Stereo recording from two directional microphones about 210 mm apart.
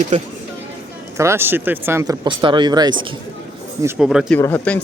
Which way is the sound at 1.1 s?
15° right (ahead or behind).